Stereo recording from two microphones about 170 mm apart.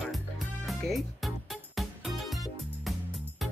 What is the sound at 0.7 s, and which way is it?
Music, centre (ahead or behind).